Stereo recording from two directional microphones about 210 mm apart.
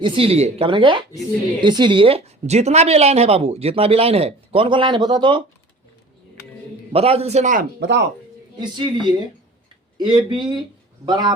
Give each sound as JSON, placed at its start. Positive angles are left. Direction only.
{"t": 0.0, "sound": "a woman's voice", "side_deg": -25}
{"t": 6.9, "sound": "a man's voice", "side_deg": -30}
{"t": 8.5, "sound": "a woman's voice", "side_deg": -20}